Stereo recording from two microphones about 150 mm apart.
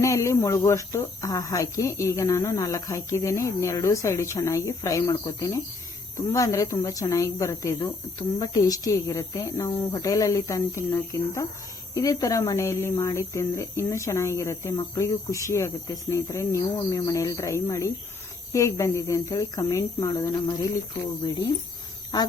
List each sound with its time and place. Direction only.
0.0 s speech: 20° left (ahead or behind)